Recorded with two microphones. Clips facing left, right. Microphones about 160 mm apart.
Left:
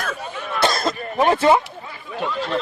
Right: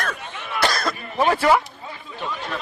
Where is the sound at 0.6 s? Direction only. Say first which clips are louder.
Left 2 dB; 25° left (ahead or behind).